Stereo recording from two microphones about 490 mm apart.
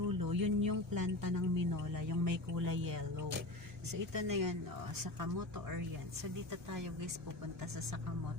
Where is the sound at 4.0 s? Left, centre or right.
Right.